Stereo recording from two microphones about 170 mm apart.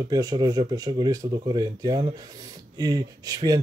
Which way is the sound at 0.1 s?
25° right (ahead or behind).